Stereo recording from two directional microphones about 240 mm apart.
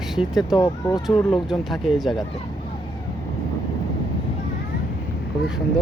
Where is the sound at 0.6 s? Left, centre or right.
Centre.